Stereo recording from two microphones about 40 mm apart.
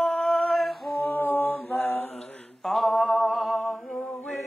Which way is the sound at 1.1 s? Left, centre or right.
Left.